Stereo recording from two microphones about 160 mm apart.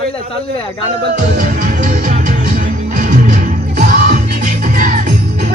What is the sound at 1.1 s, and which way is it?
Music, 55° right (ahead or behind).